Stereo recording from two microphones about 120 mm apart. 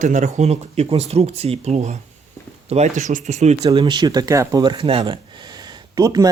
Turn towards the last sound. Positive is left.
turn(degrees=-30)  # may be behind; listen again after turning